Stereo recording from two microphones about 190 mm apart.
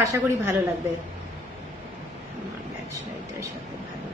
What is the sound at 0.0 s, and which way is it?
Speech, 15° right (ahead or behind).